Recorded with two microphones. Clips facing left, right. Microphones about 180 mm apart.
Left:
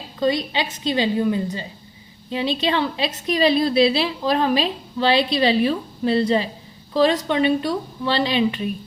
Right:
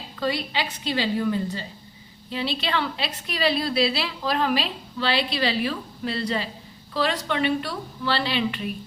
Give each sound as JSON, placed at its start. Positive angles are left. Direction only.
{"t": 0.2, "sound": "a woman's voice", "side_deg": 20}